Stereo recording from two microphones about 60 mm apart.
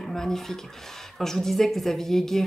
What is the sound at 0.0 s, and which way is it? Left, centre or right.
A woman's voice, centre.